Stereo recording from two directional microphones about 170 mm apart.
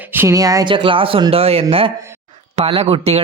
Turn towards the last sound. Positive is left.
turn(degrees=-35)  # may be behind; listen again after turning